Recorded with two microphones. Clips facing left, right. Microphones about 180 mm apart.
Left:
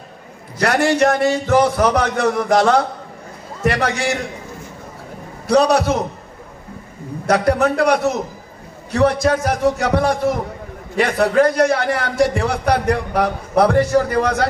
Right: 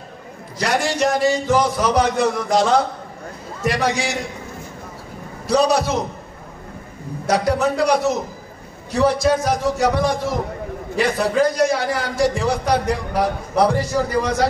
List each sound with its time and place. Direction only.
0.6 s a man's voice: 60° left (ahead or behind)
5.5 s a man's voice: 60° left (ahead or behind)
7.2 s a man's voice: 60° left (ahead or behind)